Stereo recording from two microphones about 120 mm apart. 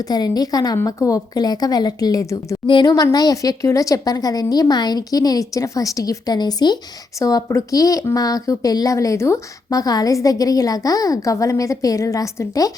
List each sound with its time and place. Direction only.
0.1 s speech: 35° left (ahead or behind)